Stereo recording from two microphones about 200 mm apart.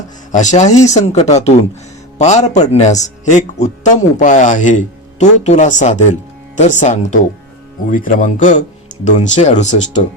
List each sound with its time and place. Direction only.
0.3 s speech: 40° left (ahead or behind)